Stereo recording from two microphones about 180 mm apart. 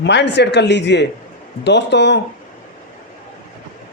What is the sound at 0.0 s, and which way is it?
Speech, 75° left (ahead or behind).